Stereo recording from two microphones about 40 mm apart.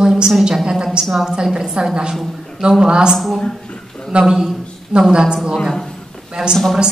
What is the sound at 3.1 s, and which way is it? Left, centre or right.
Speech, centre.